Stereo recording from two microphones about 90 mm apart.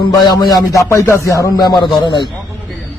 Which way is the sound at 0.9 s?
35° left (ahead or behind).